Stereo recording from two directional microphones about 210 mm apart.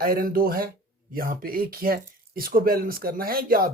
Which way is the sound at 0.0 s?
45° right (ahead or behind).